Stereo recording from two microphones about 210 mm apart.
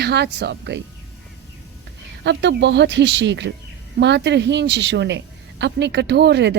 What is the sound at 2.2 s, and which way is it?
Speech, 55° right (ahead or behind).